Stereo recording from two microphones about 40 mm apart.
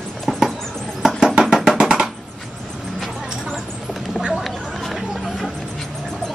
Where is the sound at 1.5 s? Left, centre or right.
Centre.